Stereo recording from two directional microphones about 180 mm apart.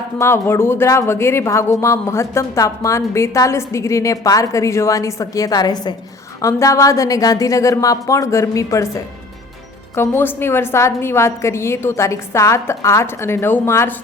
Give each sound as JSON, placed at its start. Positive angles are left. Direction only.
{"t": 0.2, "sound": "speech", "side_deg": 15}
{"t": 9.9, "sound": "speech", "side_deg": 10}